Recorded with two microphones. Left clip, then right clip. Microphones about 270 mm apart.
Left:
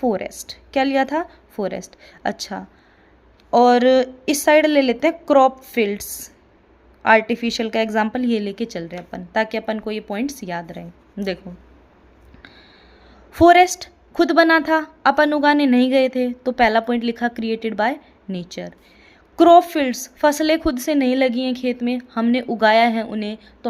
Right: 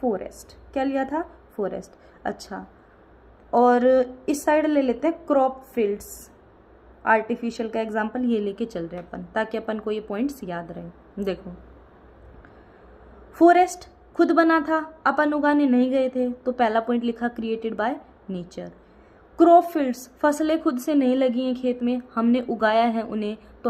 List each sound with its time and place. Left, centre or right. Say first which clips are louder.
0.0 s a woman's voice: left 5 dB; left
7.0 s a woman's voice: left 6 dB; left
13.3 s a woman's voice: left 5 dB; left